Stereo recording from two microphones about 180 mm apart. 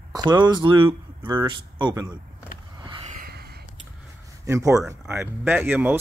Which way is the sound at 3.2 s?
60° right (ahead or behind).